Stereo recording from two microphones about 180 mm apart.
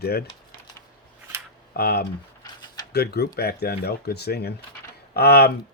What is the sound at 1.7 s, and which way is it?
Speech, 60° left (ahead or behind).